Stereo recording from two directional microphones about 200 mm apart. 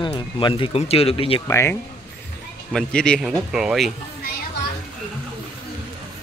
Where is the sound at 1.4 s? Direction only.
15° left (ahead or behind).